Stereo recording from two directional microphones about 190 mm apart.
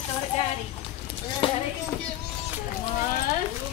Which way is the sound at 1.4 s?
25° left (ahead or behind).